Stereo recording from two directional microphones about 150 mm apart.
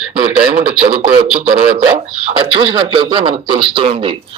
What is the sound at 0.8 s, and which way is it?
Speech, 45° right (ahead or behind).